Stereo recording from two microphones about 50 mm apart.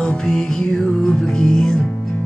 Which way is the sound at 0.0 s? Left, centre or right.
Centre.